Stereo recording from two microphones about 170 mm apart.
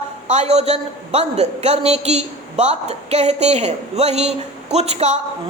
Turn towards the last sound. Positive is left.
turn(degrees=-40)  # may be behind; listen again after turning